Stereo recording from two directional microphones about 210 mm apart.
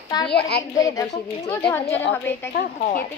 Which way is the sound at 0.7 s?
15° left (ahead or behind).